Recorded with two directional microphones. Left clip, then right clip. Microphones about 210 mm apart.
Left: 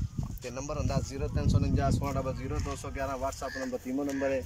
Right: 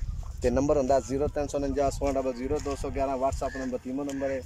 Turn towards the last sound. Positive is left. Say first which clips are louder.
# even
turn(degrees=0)  # may be behind; listen again after turning